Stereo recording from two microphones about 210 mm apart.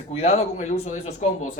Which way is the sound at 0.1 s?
30° left (ahead or behind).